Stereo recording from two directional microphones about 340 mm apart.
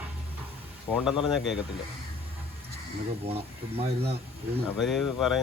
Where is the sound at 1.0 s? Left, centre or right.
Centre.